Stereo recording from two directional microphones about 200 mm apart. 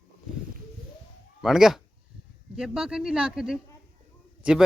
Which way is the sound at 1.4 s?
Centre (ahead or behind).